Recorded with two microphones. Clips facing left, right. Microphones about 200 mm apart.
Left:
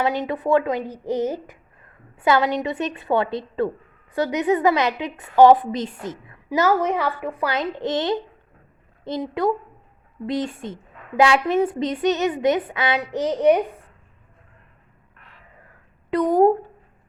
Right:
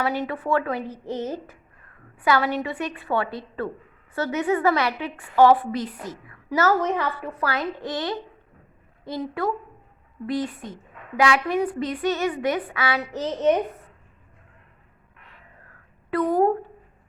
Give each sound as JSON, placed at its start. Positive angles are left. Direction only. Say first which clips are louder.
{"t": 0.3, "sound": "a woman's voice", "louder": "left 5 dB", "side_deg": 15}
{"t": 16.0, "sound": "speech", "louder": "left 4 dB", "side_deg": 20}